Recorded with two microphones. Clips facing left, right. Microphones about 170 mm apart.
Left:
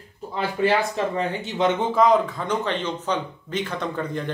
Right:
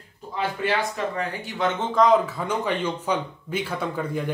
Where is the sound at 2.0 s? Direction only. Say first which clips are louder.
Right 2 dB; 5° right (ahead or behind).